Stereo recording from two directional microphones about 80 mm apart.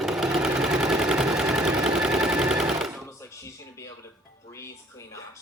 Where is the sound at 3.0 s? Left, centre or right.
Left.